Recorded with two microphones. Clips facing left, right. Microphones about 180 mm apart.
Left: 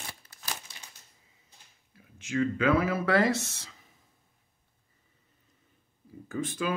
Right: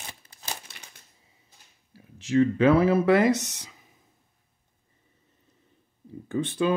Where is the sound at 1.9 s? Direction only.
35° right (ahead or behind); by 3.8 s 15° right (ahead or behind).